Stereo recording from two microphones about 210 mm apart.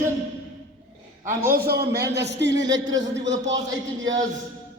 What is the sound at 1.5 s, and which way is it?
A man's voice, 50° right (ahead or behind).